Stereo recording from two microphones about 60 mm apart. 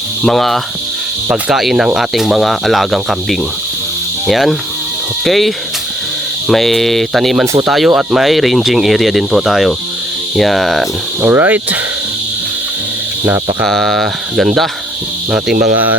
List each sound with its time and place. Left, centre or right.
0.2 s speech: centre
1.3 s speech: centre
7.4 s speech: right
7.7 s speech: centre
11.3 s speech: right
13.7 s speech: centre